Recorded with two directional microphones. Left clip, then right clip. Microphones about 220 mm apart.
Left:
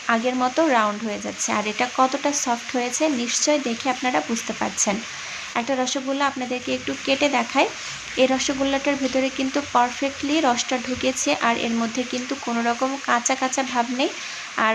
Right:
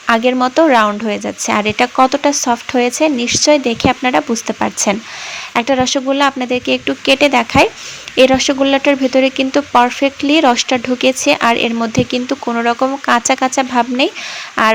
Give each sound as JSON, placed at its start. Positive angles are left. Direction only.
{"t": 0.1, "sound": "speech", "side_deg": -35}